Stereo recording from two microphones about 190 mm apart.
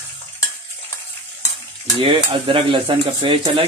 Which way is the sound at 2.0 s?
25° right (ahead or behind).